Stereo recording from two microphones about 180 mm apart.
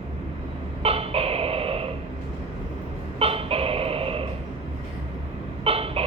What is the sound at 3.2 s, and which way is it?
Music, 30° right (ahead or behind).